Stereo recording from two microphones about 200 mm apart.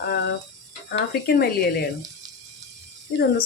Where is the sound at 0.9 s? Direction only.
50° left (ahead or behind).